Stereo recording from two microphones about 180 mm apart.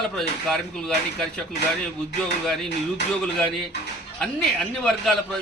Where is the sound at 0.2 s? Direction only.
Centre (ahead or behind).